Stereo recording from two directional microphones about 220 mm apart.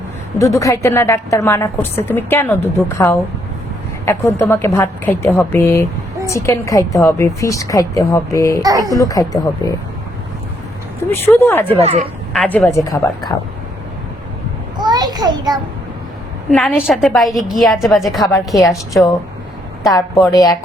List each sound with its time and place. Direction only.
0.3 s a woman's voice: 15° left (ahead or behind)
8.6 s speech: 15° right (ahead or behind)
8.9 s a woman's voice: 15° left (ahead or behind)
11.1 s a woman's voice: 10° left (ahead or behind)
11.8 s speech: 30° right (ahead or behind)
12.3 s a woman's voice: 5° left (ahead or behind)
14.8 s a sound: 20° right (ahead or behind)
16.5 s a woman's voice: 5° left (ahead or behind)
18.7 s a woman's voice: 15° left (ahead or behind)